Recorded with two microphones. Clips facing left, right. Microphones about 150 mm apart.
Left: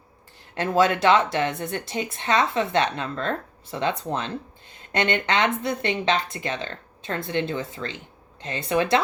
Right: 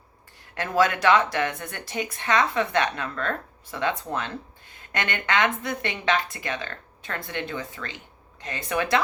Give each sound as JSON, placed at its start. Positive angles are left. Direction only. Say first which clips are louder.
{"t": 0.5, "sound": "speech", "louder": "left 2 dB", "side_deg": 25}